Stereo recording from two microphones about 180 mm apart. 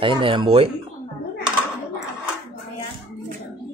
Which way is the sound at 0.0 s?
30° right (ahead or behind).